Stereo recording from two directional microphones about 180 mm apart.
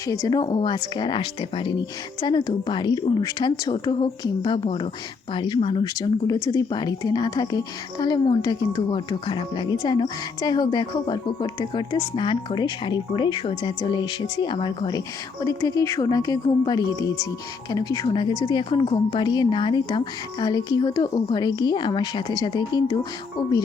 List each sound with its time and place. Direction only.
0.1 s speech: 20° left (ahead or behind)